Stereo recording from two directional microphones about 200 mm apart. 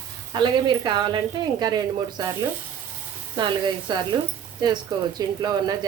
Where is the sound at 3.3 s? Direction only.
20° right (ahead or behind).